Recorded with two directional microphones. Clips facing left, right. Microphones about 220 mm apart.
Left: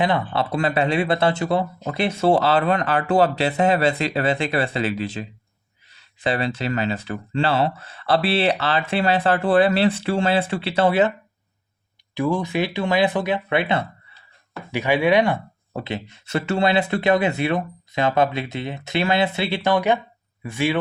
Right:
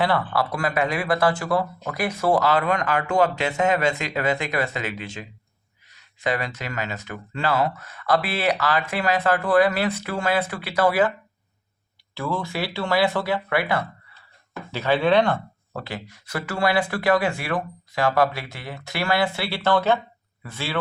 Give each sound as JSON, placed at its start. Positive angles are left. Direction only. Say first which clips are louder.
{"t": 0.0, "sound": "speech", "louder": "left 1 dB", "side_deg": 20}
{"t": 12.1, "sound": "speech", "louder": "left 6 dB", "side_deg": 15}